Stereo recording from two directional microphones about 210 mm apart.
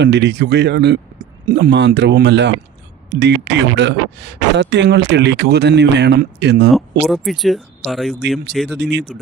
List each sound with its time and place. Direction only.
0.0 s speech: 55° right (ahead or behind)
7.0 s speech: centre (ahead or behind)
8.7 s speech: 55° right (ahead or behind)